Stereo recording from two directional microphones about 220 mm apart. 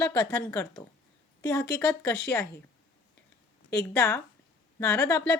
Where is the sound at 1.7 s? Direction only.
5° left (ahead or behind).